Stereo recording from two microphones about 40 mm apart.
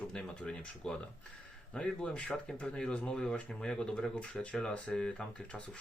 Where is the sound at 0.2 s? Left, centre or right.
Left.